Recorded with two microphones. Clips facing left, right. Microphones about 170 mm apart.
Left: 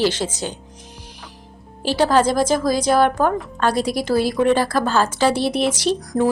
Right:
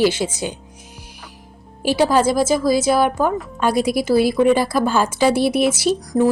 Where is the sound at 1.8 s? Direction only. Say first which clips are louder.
Right 1 dB; 10° right (ahead or behind).